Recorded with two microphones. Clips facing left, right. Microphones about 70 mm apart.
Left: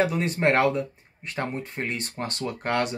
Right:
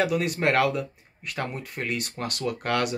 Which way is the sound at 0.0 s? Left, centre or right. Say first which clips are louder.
Left 1 dB; left.